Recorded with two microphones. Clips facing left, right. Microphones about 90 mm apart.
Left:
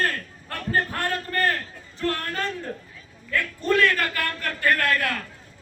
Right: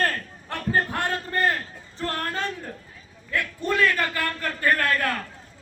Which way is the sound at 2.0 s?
35° right (ahead or behind).